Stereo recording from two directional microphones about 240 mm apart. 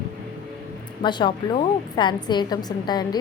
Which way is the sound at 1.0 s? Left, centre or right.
Centre.